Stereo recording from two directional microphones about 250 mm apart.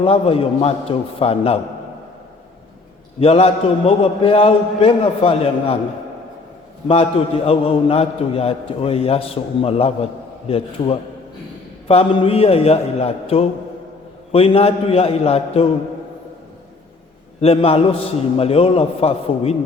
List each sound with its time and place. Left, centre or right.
0.0 s a man's voice: left
3.2 s a man's voice: left
6.8 s a man's voice: left
17.4 s a man's voice: left